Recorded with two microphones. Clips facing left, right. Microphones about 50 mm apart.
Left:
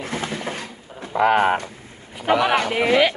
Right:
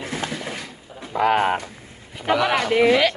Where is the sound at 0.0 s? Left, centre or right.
Left.